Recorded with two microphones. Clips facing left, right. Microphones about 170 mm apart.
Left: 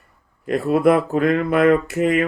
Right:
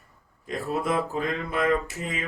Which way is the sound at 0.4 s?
65° left (ahead or behind).